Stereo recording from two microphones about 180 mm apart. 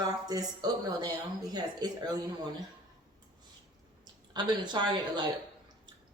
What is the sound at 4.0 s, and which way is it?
A woman's voice, 25° right (ahead or behind).